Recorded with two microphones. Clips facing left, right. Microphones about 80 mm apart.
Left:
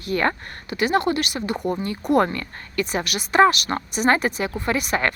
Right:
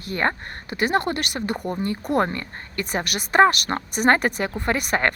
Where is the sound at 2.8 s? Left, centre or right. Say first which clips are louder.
Left 2 dB; right.